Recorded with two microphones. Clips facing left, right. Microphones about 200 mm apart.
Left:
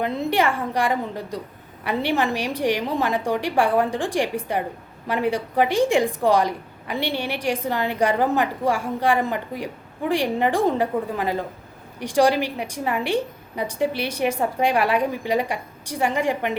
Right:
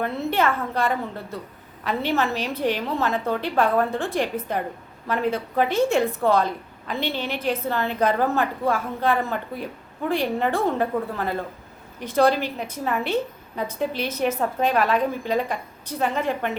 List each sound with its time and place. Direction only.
0.0 s a woman's voice: 15° left (ahead or behind)